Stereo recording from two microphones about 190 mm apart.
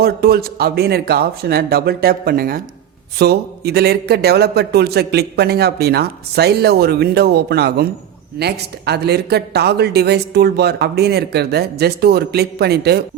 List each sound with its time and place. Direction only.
0.0 s a man's voice: 55° right (ahead or behind)